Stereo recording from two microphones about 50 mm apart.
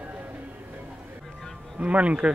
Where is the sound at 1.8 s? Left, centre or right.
Right.